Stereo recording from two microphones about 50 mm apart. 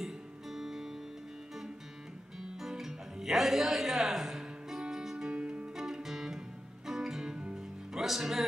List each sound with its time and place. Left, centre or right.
0.0 s music: centre
2.6 s music: centre; by 5.7 s right
6.0 s music: centre